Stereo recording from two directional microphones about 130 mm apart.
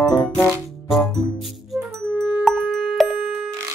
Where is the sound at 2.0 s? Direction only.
15° right (ahead or behind).